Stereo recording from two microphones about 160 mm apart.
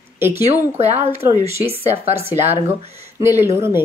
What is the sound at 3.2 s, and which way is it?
Speech, 15° right (ahead or behind).